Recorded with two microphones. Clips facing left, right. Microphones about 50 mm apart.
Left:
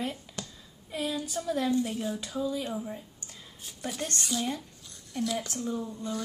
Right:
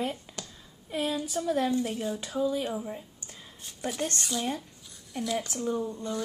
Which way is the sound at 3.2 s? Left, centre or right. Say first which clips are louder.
Right 1 dB; right.